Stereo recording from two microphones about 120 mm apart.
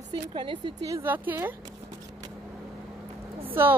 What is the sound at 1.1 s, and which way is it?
Speech, 15° right (ahead or behind).